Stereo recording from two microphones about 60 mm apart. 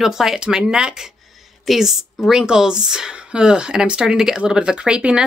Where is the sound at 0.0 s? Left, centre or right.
Centre.